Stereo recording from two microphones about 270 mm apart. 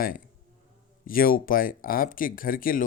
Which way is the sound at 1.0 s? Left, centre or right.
Left.